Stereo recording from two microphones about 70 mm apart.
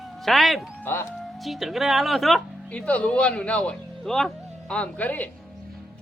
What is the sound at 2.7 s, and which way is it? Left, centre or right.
A man's voice, centre.